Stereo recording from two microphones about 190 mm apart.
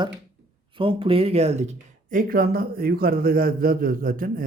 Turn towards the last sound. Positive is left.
turn(degrees=-50)  # may be behind; listen again after turning